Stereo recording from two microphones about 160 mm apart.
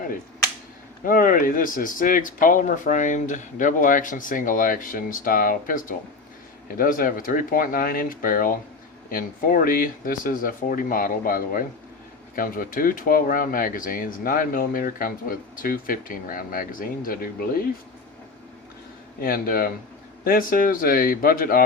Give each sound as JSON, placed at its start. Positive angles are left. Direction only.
{"t": 1.0, "sound": "speech", "side_deg": 60}
{"t": 19.2, "sound": "speech", "side_deg": 65}